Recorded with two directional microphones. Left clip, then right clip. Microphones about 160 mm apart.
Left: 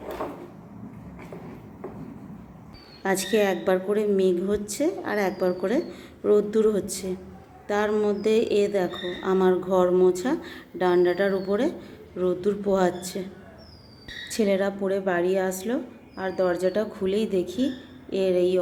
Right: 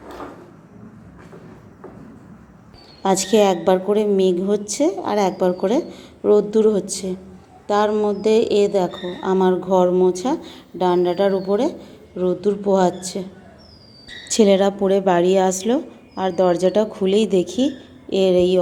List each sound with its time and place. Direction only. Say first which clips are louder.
3.0 s a woman's voice: right 7 dB; 25° right (ahead or behind)
14.3 s a woman's voice: right 9 dB; 35° right (ahead or behind)